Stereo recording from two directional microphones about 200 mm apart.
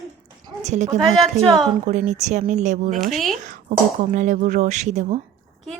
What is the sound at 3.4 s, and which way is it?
Speech, 40° right (ahead or behind).